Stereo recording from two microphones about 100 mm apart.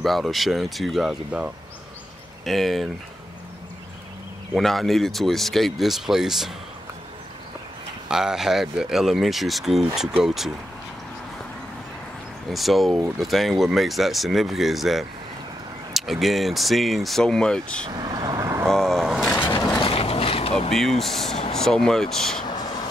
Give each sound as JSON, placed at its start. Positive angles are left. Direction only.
{"t": 0.0, "sound": "speech", "side_deg": 0}
{"t": 2.4, "sound": "speech", "side_deg": 0}
{"t": 4.6, "sound": "speech", "side_deg": 0}
{"t": 8.1, "sound": "speech", "side_deg": -5}
{"t": 12.4, "sound": "speech", "side_deg": 0}
{"t": 17.8, "sound": "vehicle", "side_deg": -45}
{"t": 18.7, "sound": "vehicle", "side_deg": 5}
{"t": 19.8, "sound": "mechanisms", "side_deg": 70}
{"t": 20.7, "sound": "speech", "side_deg": 5}
{"t": 22.5, "sound": "a sound", "side_deg": 45}